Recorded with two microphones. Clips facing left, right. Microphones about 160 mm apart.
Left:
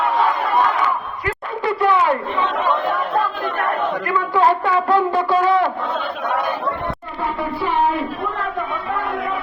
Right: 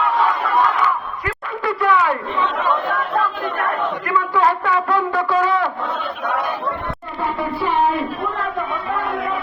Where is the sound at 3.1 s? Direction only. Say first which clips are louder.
Even; 35° left (ahead or behind).